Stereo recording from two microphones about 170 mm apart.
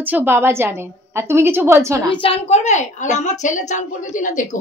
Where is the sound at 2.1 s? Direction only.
35° left (ahead or behind).